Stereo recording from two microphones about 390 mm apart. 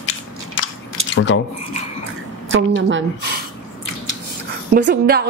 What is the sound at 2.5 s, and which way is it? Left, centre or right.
Speech, right.